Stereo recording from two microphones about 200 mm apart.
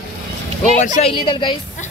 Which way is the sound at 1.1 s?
25° left (ahead or behind).